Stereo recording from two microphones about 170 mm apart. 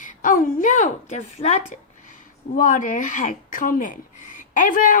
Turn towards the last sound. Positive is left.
turn(degrees=50)  # may be behind; listen again after turning